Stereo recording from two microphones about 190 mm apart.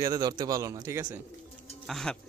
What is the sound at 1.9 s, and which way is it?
Speech, centre (ahead or behind).